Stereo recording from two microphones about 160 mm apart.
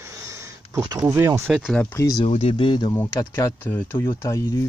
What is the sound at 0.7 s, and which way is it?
Speech, 20° right (ahead or behind).